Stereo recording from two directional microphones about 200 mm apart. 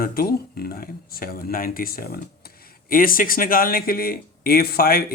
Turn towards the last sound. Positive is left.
turn(degrees=50)  # may be behind; listen again after turning